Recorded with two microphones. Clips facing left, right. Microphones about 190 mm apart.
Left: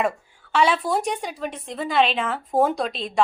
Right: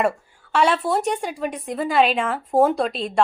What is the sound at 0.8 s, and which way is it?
A woman's voice, 5° right (ahead or behind).